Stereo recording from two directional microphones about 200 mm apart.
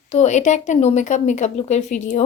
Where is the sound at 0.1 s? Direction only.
35° left (ahead or behind).